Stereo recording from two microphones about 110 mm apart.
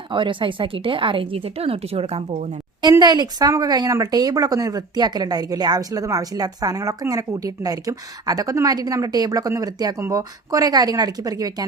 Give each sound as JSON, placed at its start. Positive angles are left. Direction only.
{"t": 0.1, "sound": "speech", "side_deg": -50}
{"t": 3.0, "sound": "a woman's voice", "side_deg": -40}